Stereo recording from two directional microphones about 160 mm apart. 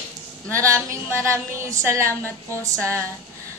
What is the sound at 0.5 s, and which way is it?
A woman's voice, 20° right (ahead or behind).